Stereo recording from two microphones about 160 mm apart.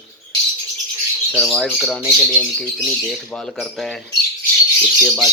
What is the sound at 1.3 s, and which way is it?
Speech, centre (ahead or behind).